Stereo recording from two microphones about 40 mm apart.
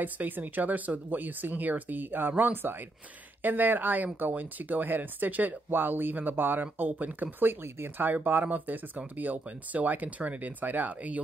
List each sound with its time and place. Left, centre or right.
0.0 s speech: right
5.7 s speech: right